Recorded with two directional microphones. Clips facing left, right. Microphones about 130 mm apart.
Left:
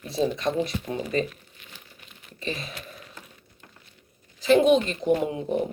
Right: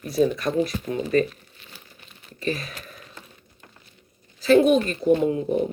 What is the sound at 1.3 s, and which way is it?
Crumpling, 30° right (ahead or behind).